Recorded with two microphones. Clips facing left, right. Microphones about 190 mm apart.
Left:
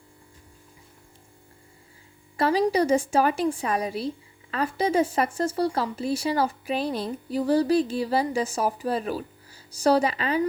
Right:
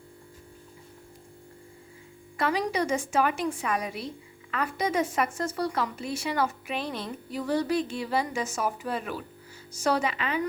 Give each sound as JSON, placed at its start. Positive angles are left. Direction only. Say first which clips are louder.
{"t": 2.4, "sound": "speech", "louder": "left 6 dB", "side_deg": 35}